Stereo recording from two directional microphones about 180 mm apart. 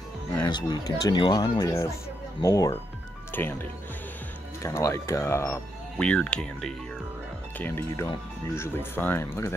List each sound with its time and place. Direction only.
0.5 s speech: 25° left (ahead or behind)
4.6 s speech: 15° left (ahead or behind)